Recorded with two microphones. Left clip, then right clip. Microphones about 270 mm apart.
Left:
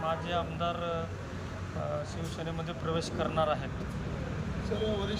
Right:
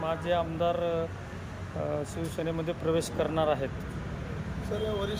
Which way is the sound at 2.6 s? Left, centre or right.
Centre.